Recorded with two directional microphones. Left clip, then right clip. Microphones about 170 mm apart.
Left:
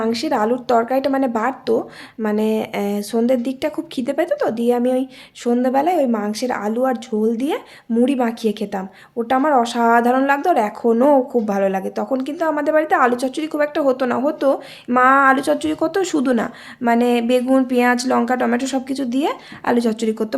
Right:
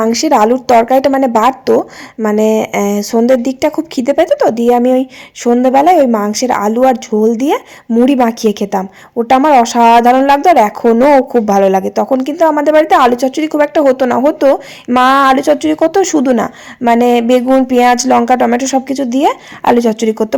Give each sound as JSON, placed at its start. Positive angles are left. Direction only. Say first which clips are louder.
{"t": 0.0, "sound": "speech", "louder": "right 10 dB", "side_deg": -30}